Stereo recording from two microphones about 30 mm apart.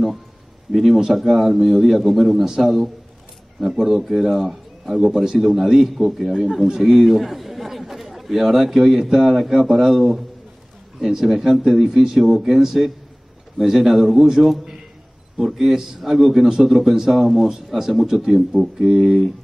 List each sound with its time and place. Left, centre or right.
0.7 s a man's voice: centre
2.4 s speech: centre
3.6 s a man's voice: centre
5.1 s a man's voice: centre
6.2 s a man's voice: centre